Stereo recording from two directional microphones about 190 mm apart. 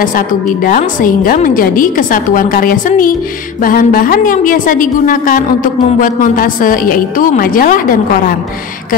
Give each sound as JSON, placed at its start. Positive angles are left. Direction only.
{"t": 0.0, "sound": "a woman's voice", "side_deg": 45}